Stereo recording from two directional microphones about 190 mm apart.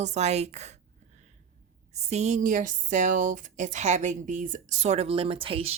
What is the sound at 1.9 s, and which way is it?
Speech, 35° right (ahead or behind).